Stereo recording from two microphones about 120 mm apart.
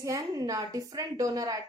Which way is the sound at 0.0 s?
30° right (ahead or behind).